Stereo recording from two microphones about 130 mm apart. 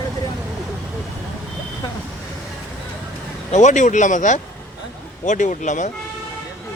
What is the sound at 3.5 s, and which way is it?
Speech, 65° left (ahead or behind).